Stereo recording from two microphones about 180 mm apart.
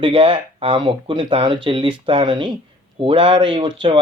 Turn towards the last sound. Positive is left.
turn(degrees=-25)  # may be behind; listen again after turning